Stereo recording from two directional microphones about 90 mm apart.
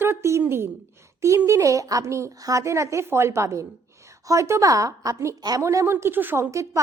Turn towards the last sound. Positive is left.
turn(degrees=-20)  # may be behind; listen again after turning